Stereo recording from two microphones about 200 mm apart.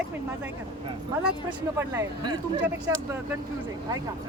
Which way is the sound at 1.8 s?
20° right (ahead or behind).